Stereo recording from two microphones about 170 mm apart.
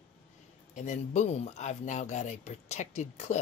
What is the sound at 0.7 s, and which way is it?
Speech, 45° left (ahead or behind).